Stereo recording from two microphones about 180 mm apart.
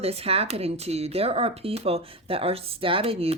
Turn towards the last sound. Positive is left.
turn(degrees=-35)  # may be behind; listen again after turning